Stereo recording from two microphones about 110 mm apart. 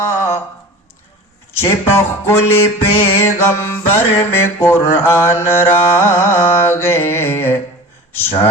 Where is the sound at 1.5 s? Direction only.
20° left (ahead or behind).